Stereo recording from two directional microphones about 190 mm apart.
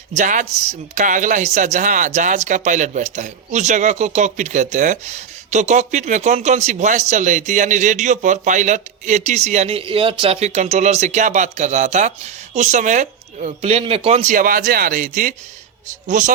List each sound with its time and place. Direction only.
0.2 s speech: 40° right (ahead or behind)